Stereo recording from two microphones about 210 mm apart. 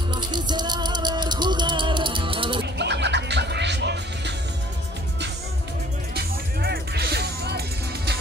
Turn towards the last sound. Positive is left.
turn(degrees=-50)  # may be behind; listen again after turning